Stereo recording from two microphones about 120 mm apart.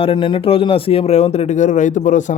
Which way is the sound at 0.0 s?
50° left (ahead or behind).